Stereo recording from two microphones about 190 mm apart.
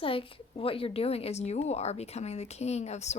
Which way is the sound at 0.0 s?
30° left (ahead or behind).